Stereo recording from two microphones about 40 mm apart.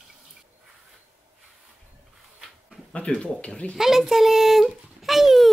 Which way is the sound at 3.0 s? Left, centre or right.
Left.